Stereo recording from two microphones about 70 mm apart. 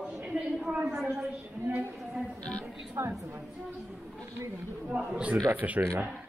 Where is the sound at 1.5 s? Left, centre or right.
Right.